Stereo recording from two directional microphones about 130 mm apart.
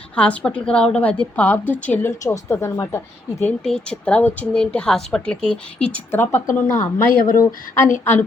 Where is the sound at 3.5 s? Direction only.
5° left (ahead or behind).